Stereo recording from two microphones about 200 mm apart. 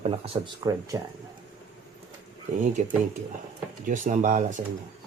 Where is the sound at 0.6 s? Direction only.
15° right (ahead or behind).